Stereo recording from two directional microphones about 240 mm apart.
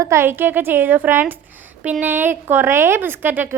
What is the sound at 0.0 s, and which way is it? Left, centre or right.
A woman's voice, centre.